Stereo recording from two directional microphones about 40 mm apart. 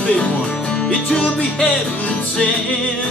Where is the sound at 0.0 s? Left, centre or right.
Left.